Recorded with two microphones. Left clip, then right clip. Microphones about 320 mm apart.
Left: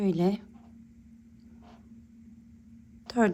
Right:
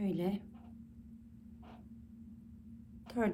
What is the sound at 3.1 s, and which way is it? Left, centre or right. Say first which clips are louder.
Speech: left 9 dB; left.